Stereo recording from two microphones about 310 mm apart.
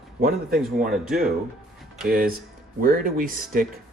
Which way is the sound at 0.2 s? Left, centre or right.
Right.